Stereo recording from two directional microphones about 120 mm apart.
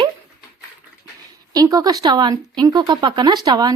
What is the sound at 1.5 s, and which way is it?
Speech, 30° right (ahead or behind).